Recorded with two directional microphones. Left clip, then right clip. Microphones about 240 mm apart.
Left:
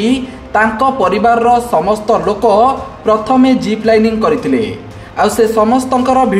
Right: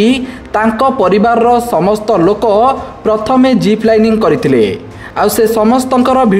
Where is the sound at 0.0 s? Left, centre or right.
Right.